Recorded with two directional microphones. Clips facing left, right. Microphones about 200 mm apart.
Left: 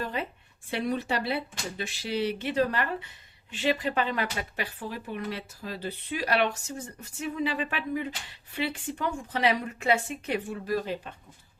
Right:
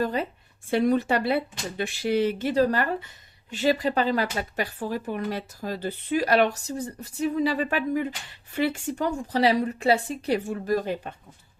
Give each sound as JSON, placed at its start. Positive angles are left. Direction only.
{"t": 0.0, "sound": "a woman's voice", "side_deg": -40}